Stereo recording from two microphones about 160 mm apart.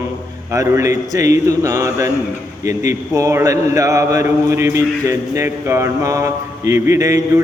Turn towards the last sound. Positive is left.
turn(degrees=-20)  # may be behind; listen again after turning